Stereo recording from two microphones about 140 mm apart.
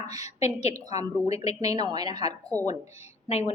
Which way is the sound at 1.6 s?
25° right (ahead or behind).